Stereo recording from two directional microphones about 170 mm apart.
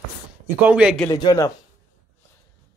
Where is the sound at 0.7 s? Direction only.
5° right (ahead or behind).